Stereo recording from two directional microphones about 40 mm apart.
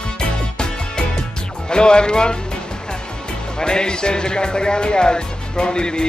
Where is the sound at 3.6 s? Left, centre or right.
Left.